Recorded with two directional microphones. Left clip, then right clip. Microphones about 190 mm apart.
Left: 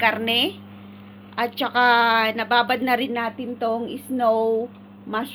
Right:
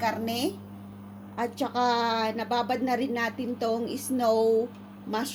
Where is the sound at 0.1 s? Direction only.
10° right (ahead or behind).